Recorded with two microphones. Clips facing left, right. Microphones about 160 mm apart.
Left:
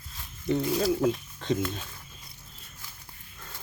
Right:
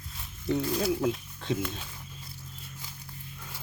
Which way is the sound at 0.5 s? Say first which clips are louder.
Left 2 dB; 15° left (ahead or behind).